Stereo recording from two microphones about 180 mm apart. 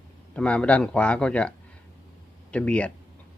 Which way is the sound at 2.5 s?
5° left (ahead or behind).